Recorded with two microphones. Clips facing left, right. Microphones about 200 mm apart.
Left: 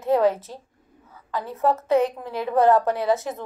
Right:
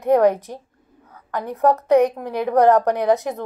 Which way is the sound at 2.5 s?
15° right (ahead or behind).